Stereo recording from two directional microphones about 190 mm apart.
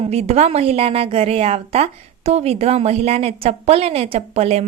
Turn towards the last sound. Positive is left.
turn(degrees=-35)  # may be behind; listen again after turning